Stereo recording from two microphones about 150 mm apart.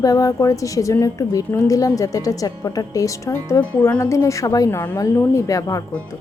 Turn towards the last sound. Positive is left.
turn(degrees=20)  # may be behind; listen again after turning